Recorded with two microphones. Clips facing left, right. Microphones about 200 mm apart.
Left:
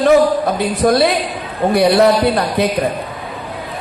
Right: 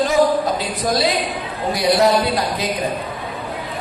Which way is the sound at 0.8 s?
60° left (ahead or behind).